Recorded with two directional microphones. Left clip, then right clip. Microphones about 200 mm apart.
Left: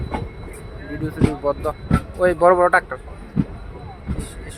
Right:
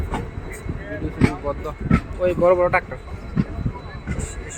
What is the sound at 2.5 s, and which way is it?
Speech, 15° left (ahead or behind).